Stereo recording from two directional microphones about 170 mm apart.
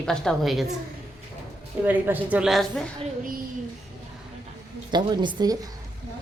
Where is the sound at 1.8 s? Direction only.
10° right (ahead or behind).